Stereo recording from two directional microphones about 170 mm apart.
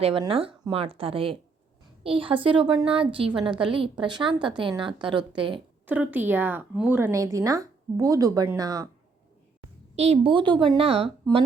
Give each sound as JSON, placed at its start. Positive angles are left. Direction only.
{"t": 0.0, "sound": "a woman's voice", "side_deg": -30}
{"t": 5.8, "sound": "speech", "side_deg": -10}
{"t": 9.9, "sound": "a woman's voice", "side_deg": -40}